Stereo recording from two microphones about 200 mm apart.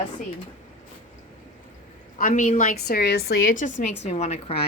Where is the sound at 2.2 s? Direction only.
40° left (ahead or behind).